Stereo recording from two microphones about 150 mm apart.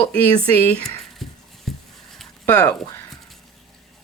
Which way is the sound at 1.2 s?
Centre (ahead or behind).